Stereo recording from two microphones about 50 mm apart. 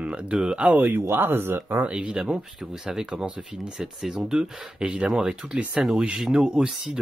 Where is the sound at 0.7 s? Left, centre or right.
Right.